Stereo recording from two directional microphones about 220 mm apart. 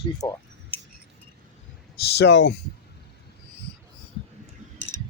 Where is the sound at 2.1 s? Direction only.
50° left (ahead or behind).